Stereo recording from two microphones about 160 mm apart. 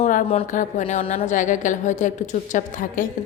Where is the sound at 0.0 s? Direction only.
55° left (ahead or behind).